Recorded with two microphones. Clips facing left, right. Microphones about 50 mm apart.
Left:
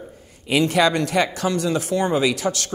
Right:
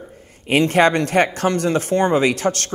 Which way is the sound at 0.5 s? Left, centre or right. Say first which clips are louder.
Right 3 dB; right.